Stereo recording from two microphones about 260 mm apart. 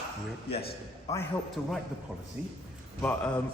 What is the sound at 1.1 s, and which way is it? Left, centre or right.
Speech, centre.